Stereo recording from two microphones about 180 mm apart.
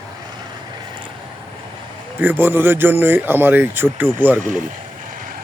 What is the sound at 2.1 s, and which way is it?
Speech, 10° right (ahead or behind).